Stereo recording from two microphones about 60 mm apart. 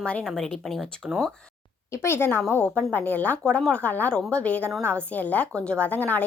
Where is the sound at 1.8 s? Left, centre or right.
Left.